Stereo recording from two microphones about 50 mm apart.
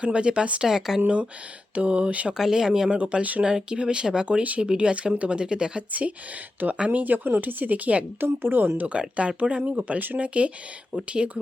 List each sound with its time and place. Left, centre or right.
0.0 s speech: centre
0.7 s speech: centre
1.0 s speech: right
2.3 s speech: centre
3.0 s speech: right
3.4 s speech: centre
4.3 s speech: right
5.9 s speech: right
7.0 s speech: right
8.2 s speech: right
8.9 s speech: right